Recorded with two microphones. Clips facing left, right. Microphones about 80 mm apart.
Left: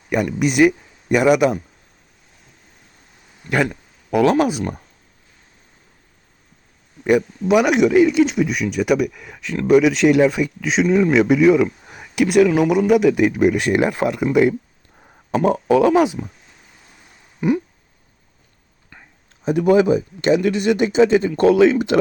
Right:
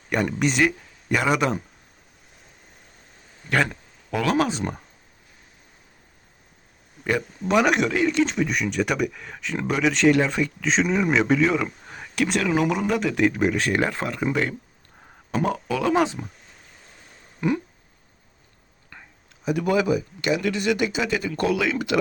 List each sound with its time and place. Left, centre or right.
0.1 s speech: centre
3.5 s a sound: centre
4.2 s speech: centre
7.2 s speech: centre
15.4 s speech: left
15.9 s speech: centre
17.4 s speech: centre
19.5 s speech: left